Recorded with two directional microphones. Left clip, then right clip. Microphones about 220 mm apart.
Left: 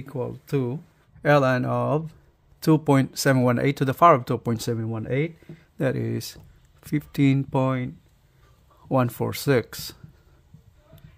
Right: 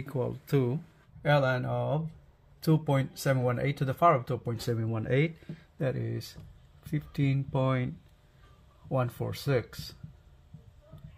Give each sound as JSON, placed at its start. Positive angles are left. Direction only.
{"t": 0.0, "sound": "speech", "side_deg": 20}
{"t": 1.2, "sound": "speech", "side_deg": 55}
{"t": 4.6, "sound": "speech", "side_deg": 25}
{"t": 5.8, "sound": "speech", "side_deg": 45}
{"t": 8.8, "sound": "speech", "side_deg": 50}